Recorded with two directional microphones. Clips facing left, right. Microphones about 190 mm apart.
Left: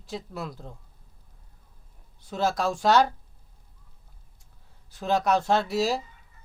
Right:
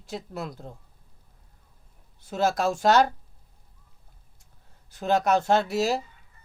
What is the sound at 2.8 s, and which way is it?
Speech, 45° right (ahead or behind).